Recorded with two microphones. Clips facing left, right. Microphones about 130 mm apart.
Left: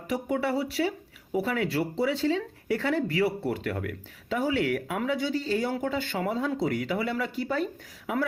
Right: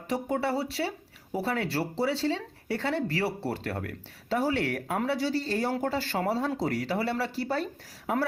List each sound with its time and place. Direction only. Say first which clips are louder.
0.1 s speech: left 1 dB; 30° right (ahead or behind)